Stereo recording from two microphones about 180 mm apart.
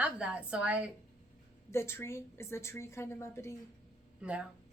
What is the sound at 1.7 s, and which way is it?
A woman's voice, 15° left (ahead or behind).